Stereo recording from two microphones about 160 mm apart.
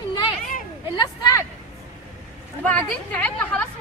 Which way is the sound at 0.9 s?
25° left (ahead or behind).